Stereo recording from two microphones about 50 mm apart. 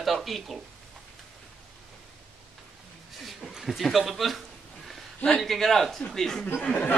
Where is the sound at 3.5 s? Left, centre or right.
Centre.